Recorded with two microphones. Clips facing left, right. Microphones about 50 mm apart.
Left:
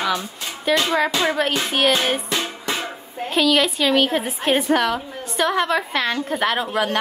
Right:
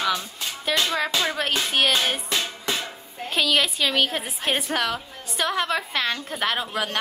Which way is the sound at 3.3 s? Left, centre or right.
Centre.